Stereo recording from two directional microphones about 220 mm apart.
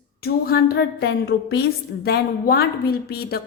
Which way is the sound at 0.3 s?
45° left (ahead or behind).